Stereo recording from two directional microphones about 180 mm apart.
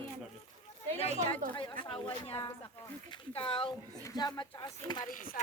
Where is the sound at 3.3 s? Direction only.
30° left (ahead or behind).